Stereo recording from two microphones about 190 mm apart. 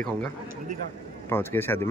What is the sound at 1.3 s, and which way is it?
Speech, 10° left (ahead or behind).